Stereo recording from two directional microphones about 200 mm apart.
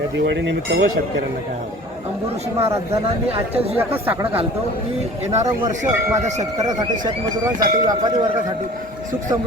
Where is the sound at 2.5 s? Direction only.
10° right (ahead or behind).